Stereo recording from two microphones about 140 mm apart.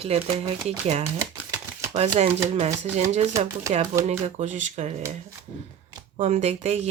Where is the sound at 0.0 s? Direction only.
45° right (ahead or behind).